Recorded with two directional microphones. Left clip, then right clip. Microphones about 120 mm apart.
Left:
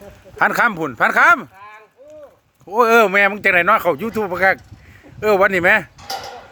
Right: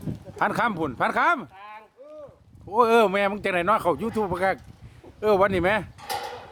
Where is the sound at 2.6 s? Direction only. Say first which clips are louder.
Left 6 dB; 5° left (ahead or behind).